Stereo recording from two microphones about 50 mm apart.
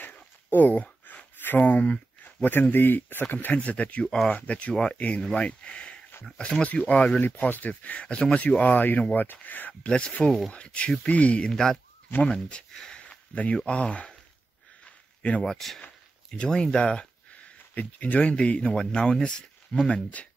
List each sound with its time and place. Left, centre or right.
0.5 s speech: left
2.4 s a man's voice: left
3.5 s a man's voice: left
9.8 s speech: centre
11.5 s speech: centre
12.7 s a sound: centre
13.6 s speech: left
15.4 s speech: centre
19.9 s speech: left